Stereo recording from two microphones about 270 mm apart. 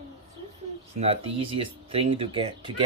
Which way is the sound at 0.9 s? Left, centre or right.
Right.